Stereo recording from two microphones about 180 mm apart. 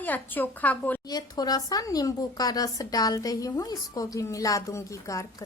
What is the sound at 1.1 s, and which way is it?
Speech, 20° left (ahead or behind).